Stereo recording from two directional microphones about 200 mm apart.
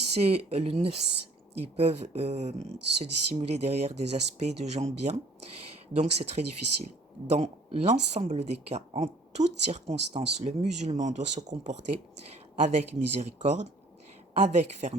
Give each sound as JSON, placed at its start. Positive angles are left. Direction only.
{"t": 0.1, "sound": "speech", "side_deg": -30}